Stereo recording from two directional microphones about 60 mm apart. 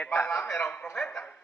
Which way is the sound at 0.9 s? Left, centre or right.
Centre.